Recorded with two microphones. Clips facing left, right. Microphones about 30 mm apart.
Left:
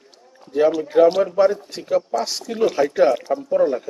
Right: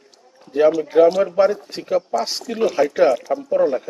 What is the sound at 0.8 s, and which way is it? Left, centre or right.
Speech, centre.